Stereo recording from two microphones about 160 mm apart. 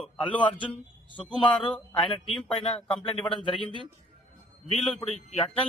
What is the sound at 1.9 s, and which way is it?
Speech, 35° left (ahead or behind).